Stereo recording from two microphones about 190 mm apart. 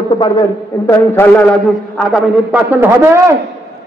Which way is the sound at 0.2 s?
15° left (ahead or behind).